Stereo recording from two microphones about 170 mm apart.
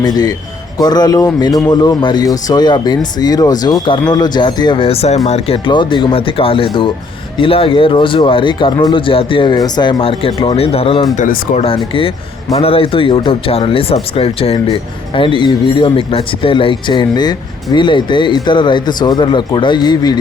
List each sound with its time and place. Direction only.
0.0 s speech: 25° left (ahead or behind)
11.2 s speech: 50° left (ahead or behind)
11.6 s speech: 30° left (ahead or behind)